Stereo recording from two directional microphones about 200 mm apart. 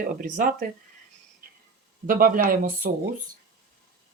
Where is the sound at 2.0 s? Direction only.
45° right (ahead or behind).